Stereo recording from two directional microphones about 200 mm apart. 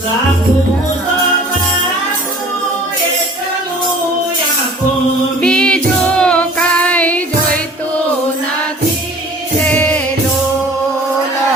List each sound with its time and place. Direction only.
5.4 s child singing: 5° left (ahead or behind)
9.6 s music: 5° left (ahead or behind)